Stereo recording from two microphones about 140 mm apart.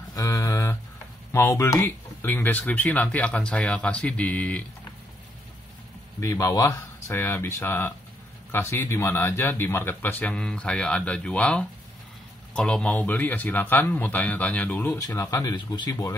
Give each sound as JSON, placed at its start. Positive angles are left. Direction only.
{"t": 0.1, "sound": "a sound", "side_deg": 25}
{"t": 1.3, "sound": "speech", "side_deg": 20}
{"t": 6.1, "sound": "speech", "side_deg": 20}
{"t": 15.0, "sound": "speech", "side_deg": 25}